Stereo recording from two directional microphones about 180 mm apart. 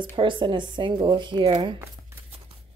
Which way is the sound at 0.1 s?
25° right (ahead or behind).